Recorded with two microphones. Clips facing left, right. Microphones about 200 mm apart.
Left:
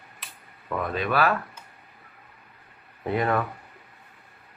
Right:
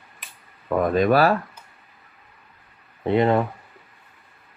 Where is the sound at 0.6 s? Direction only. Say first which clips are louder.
Right 9 dB; 45° right (ahead or behind).